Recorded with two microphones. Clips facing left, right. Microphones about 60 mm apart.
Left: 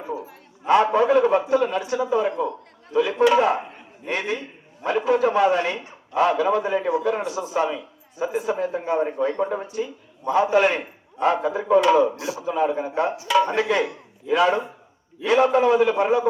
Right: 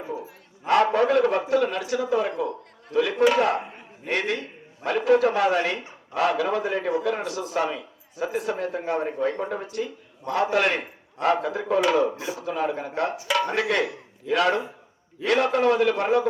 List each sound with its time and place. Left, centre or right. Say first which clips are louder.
0.7 s speech: left 2 dB; centre